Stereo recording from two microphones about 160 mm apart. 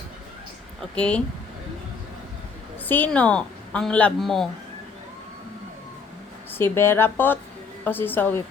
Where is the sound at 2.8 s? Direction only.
10° left (ahead or behind).